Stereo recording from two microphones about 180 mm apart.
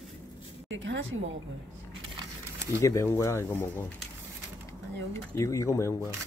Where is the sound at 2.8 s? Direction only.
15° left (ahead or behind).